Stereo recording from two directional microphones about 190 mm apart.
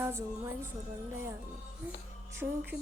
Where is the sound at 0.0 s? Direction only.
15° right (ahead or behind).